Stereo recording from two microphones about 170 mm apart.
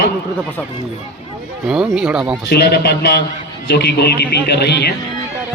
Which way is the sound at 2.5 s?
70° left (ahead or behind).